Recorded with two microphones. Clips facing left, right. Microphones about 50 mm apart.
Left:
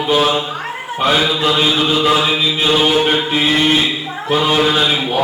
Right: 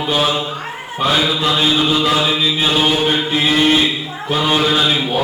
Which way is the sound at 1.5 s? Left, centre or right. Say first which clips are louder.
Even; centre.